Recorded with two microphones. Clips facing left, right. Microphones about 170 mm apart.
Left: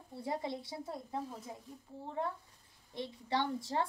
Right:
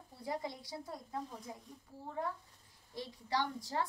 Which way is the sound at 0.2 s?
25° left (ahead or behind).